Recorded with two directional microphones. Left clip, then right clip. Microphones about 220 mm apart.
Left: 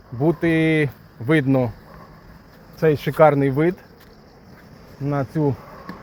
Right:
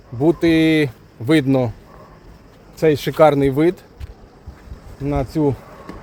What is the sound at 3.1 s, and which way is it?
Speech, 5° right (ahead or behind).